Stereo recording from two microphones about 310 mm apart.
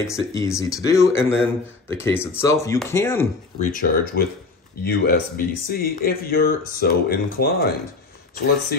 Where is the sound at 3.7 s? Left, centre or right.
Left.